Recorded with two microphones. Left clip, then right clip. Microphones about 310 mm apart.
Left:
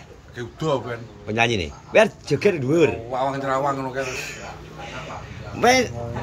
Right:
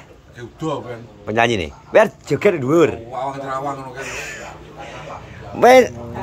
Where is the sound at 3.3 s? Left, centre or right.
Centre.